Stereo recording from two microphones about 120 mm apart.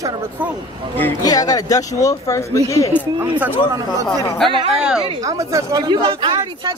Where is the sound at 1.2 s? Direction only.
30° left (ahead or behind).